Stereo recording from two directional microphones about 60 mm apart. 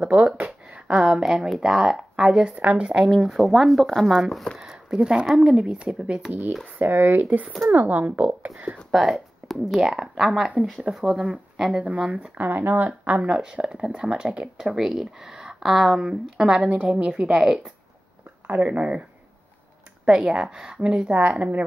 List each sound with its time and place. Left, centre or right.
0.0 s a sound: right
0.9 s speech: centre; by 2.9 s right
3.1 s speech: centre
4.6 s speech: centre
6.8 s speech: right
8.9 s speech: centre
11.8 s speech: right
13.2 s speech: centre
17.4 s speech: centre
18.5 s speech: right
20.1 s speech: centre